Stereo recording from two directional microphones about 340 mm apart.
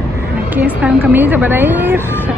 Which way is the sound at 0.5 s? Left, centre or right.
Centre.